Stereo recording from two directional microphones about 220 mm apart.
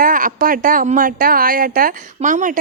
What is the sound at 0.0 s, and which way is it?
A woman's voice, 40° right (ahead or behind).